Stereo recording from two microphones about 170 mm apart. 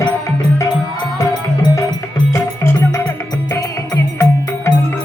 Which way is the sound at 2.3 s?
15° left (ahead or behind).